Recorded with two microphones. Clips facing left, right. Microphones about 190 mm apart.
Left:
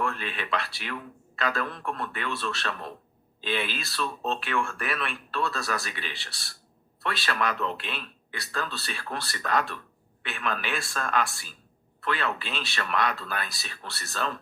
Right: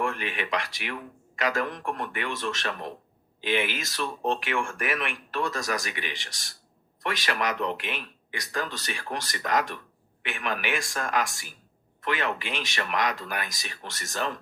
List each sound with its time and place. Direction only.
0.0 s speech: 15° right (ahead or behind)